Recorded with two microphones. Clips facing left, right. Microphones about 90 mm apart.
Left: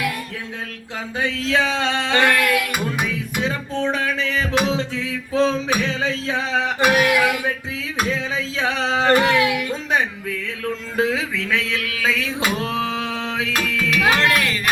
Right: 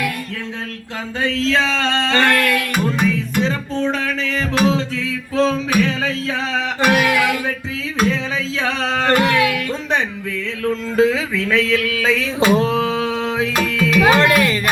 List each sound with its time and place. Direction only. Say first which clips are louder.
1.2 s music: right 2 dB; 10° left (ahead or behind)
8.5 s a sound: even; 15° left (ahead or behind)
10.9 s music: right 5 dB; 10° left (ahead or behind)